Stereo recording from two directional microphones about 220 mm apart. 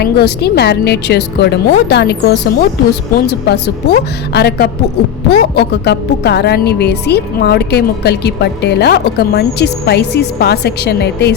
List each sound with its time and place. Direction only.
0.0 s a woman's voice: 50° left (ahead or behind)